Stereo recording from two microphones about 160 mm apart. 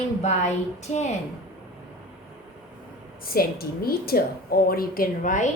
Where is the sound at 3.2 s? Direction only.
70° left (ahead or behind); by 5.5 s 50° left (ahead or behind).